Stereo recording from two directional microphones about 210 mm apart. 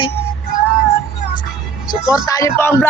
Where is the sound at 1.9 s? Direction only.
15° left (ahead or behind).